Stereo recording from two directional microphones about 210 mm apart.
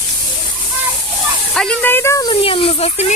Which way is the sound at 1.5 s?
5° left (ahead or behind).